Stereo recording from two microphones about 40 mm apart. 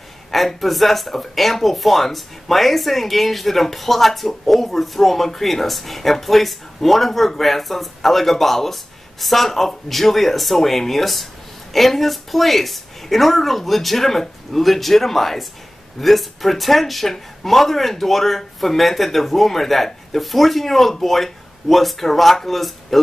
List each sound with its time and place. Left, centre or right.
0.3 s speech: centre